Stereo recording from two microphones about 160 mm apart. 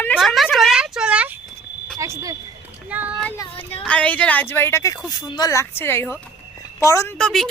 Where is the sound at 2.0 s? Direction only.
20° right (ahead or behind).